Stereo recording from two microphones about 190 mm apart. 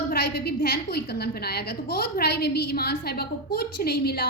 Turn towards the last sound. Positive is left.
turn(degrees=55)  # may be behind; listen again after turning